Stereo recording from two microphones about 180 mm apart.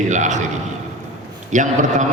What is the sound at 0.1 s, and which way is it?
Speech, 40° right (ahead or behind).